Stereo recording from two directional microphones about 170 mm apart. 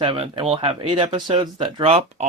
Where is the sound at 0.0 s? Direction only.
30° right (ahead or behind).